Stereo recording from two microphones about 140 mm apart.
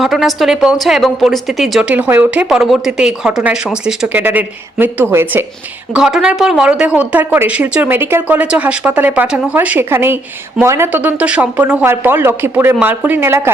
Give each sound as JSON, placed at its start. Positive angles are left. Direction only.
{"t": 0.0, "sound": "a woman's voice", "side_deg": 0}
{"t": 5.9, "sound": "speech", "side_deg": -5}